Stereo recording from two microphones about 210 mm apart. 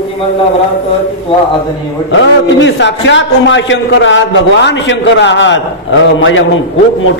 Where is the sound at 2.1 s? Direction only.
60° left (ahead or behind).